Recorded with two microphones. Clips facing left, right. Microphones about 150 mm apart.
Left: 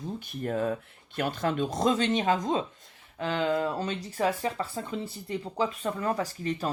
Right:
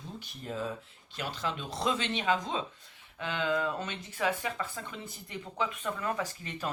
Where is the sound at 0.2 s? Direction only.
55° left (ahead or behind).